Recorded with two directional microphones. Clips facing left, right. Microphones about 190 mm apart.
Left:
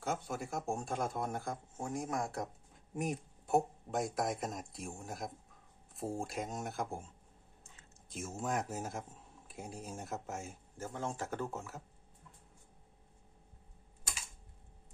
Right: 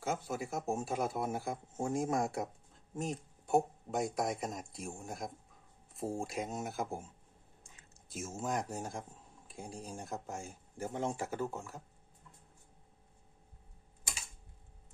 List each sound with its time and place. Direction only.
0.0 s a man's voice: centre (ahead or behind)
1.8 s speech: 25° right (ahead or behind)
2.9 s speech: 15° left (ahead or behind)
3.4 s a man's voice: centre (ahead or behind)
10.8 s speech: 15° right (ahead or behind); by 11.8 s centre (ahead or behind)